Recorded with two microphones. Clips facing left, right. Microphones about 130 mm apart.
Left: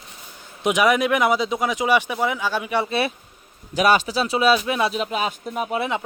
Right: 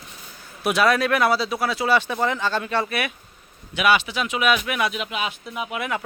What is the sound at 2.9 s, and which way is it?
Speech, 30° left (ahead or behind).